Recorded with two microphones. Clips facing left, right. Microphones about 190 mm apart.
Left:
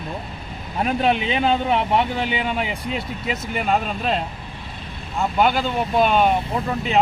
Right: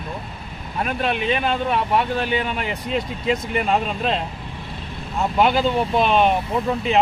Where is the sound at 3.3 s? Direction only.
5° left (ahead or behind).